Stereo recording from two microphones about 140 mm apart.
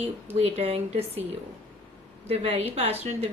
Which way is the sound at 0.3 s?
45° right (ahead or behind).